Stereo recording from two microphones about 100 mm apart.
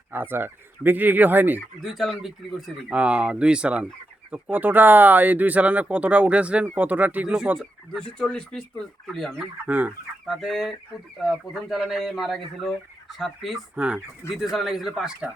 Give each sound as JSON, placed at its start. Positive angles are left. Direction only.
{"t": 0.1, "sound": "speech", "side_deg": -20}
{"t": 1.8, "sound": "speech", "side_deg": 0}
{"t": 2.9, "sound": "speech", "side_deg": -10}
{"t": 7.9, "sound": "speech", "side_deg": 5}
{"t": 9.6, "sound": "speech", "side_deg": -15}
{"t": 10.2, "sound": "speech", "side_deg": 0}
{"t": 13.7, "sound": "speech", "side_deg": -15}
{"t": 14.3, "sound": "speech", "side_deg": 0}